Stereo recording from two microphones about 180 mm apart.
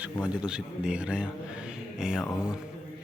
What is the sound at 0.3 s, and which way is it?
A man's voice, 5° right (ahead or behind).